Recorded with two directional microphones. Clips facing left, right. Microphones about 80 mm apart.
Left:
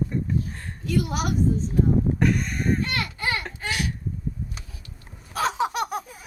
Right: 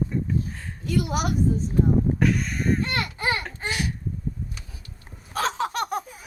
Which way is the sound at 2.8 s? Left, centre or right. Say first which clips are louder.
Right 1 dB; right.